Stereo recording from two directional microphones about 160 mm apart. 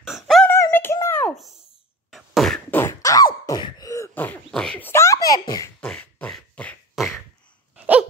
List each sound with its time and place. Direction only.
0.0 s a sound: centre (ahead or behind)
0.5 s synthetic singing: 15° left (ahead or behind)
1.0 s a sound: 10° left (ahead or behind)
1.3 s a sound: centre (ahead or behind)
2.0 s beatboxing: centre (ahead or behind)
2.8 s beatboxing: 20° left (ahead or behind)
3.4 s throat clearing: 25° left (ahead or behind)
5.8 s beatboxing: 5° left (ahead or behind)
7.7 s dog: 10° right (ahead or behind)